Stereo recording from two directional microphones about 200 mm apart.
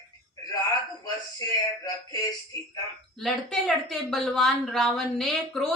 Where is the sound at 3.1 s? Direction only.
Centre (ahead or behind).